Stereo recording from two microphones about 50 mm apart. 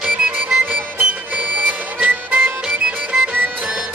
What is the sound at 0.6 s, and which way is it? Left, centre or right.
Music, right.